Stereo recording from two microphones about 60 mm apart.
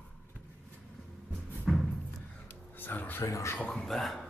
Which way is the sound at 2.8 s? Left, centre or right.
Left.